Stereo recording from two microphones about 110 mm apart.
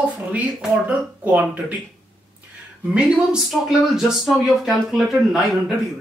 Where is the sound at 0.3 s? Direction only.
10° right (ahead or behind).